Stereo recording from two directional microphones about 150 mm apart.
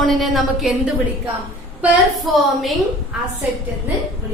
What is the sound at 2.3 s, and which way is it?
Speech, centre (ahead or behind).